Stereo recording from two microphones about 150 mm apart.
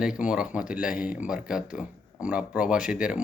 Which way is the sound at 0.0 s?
5° right (ahead or behind).